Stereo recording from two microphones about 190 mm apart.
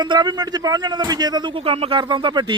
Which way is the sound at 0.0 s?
20° right (ahead or behind).